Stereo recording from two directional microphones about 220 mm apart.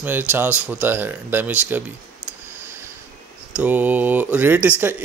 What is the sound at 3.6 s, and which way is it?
Speech, 5° right (ahead or behind).